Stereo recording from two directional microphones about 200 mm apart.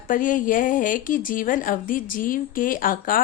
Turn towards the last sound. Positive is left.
turn(degrees=45)  # may be behind; listen again after turning